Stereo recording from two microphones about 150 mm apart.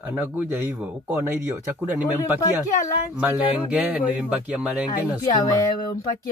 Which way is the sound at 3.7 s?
10° right (ahead or behind).